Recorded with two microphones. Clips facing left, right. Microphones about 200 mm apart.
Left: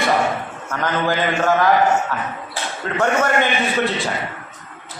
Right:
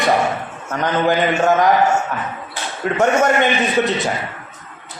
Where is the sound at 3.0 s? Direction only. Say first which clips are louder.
Right 3 dB; 20° right (ahead or behind).